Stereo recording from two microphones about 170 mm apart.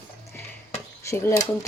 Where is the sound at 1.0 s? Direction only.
15° left (ahead or behind).